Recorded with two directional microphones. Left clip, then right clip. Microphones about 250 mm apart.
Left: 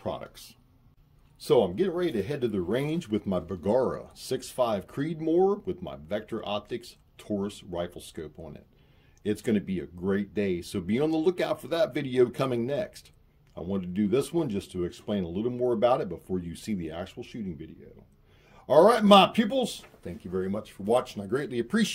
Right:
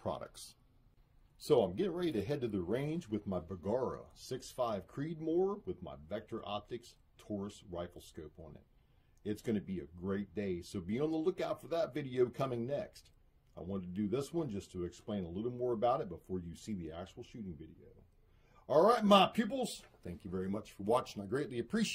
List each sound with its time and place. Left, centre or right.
0.0 s a sound: right
1.5 s speech: centre
2.7 s speech: centre
20.0 s speech: right; by 21.8 s centre